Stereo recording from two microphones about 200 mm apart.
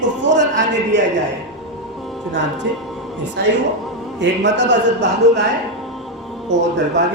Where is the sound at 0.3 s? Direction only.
65° right (ahead or behind).